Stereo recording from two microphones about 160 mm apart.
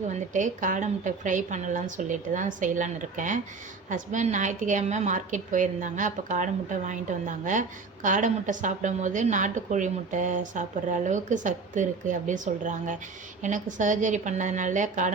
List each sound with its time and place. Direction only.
0.1 s a woman's voice: 50° right (ahead or behind)